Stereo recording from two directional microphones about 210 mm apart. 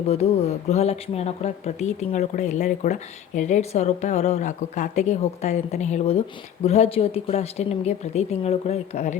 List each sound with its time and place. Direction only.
0.1 s speech: 30° left (ahead or behind)